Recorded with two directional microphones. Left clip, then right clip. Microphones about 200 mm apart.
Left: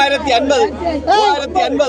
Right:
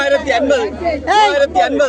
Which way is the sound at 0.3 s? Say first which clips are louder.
Left 1 dB; 20° right (ahead or behind).